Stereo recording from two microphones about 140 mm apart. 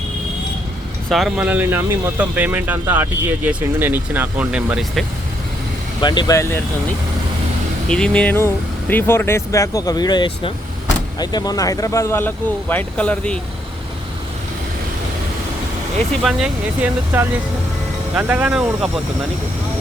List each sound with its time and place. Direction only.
1.1 s speech: centre (ahead or behind)
1.5 s speech: 15° right (ahead or behind)
6.0 s speech: 35° left (ahead or behind)
7.9 s speech: 5° left (ahead or behind)
16.2 s speech: 5° right (ahead or behind)